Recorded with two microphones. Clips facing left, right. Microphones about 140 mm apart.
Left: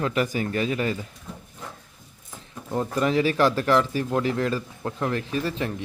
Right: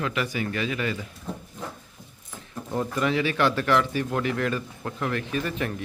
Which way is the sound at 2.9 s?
35° left (ahead or behind).